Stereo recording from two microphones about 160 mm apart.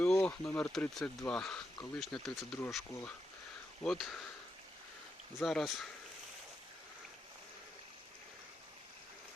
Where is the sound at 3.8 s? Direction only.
Centre (ahead or behind).